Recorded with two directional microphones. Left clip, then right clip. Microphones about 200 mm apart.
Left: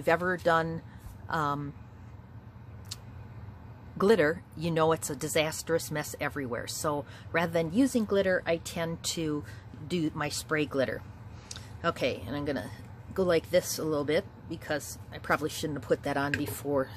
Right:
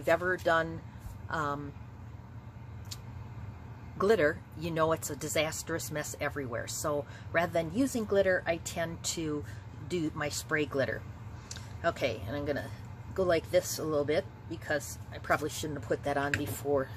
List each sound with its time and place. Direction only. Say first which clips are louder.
0.0 s speech: left 2 dB; 45° left (ahead or behind)
4.0 s speech: left 2 dB; 45° left (ahead or behind)